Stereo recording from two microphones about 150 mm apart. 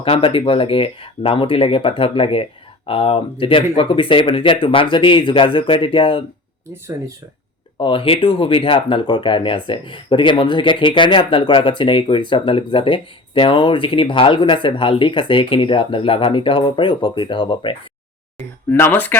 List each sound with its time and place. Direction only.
0.0 s speech: 35° left (ahead or behind)
7.8 s speech: 35° left (ahead or behind)
18.7 s speech: 15° left (ahead or behind)